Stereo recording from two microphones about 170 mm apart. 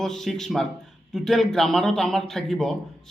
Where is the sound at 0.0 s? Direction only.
5° left (ahead or behind).